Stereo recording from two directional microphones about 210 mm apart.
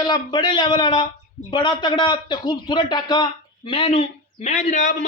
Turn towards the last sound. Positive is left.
turn(degrees=35)  # may be behind; listen again after turning